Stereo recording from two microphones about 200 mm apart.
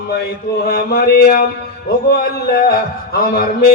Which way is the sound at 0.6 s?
50° left (ahead or behind).